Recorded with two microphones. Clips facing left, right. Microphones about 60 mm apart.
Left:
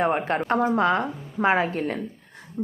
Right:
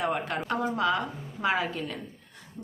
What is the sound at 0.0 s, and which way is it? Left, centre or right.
Speech, left.